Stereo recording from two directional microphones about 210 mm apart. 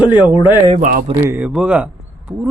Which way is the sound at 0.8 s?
40° right (ahead or behind).